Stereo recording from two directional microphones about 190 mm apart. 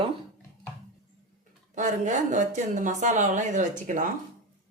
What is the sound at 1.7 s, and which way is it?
A woman's voice, 40° right (ahead or behind).